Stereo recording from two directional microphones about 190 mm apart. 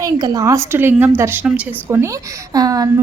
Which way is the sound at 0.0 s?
20° right (ahead or behind).